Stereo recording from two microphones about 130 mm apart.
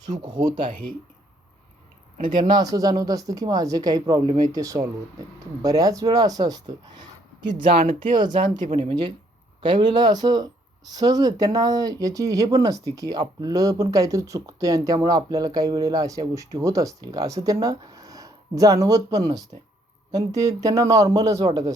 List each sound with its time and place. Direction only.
0.1 s speech: 35° right (ahead or behind)
0.5 s speech: 90° right
2.4 s speech: 30° right (ahead or behind)
7.4 s speech: 45° right (ahead or behind)